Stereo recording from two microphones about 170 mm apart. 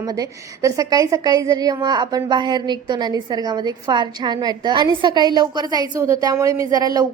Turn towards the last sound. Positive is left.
turn(degrees=-20)  # may be behind; listen again after turning